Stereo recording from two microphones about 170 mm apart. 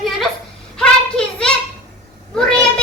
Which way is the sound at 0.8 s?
5° left (ahead or behind).